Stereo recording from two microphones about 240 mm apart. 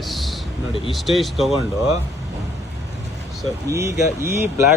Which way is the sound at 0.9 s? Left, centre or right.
Centre.